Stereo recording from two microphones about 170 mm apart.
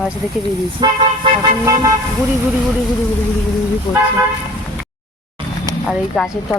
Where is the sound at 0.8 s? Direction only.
25° right (ahead or behind).